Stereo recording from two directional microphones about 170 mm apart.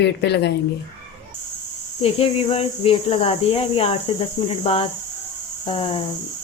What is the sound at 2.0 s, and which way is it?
Speech, 35° left (ahead or behind).